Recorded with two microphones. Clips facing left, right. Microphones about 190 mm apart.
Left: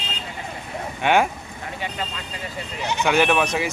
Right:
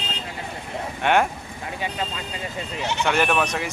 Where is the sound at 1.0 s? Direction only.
5° left (ahead or behind).